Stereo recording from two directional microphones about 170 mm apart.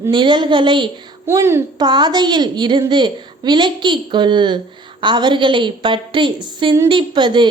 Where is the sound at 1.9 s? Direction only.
25° right (ahead or behind).